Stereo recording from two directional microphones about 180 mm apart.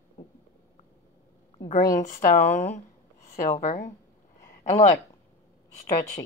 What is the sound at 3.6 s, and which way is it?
Speech, 45° left (ahead or behind).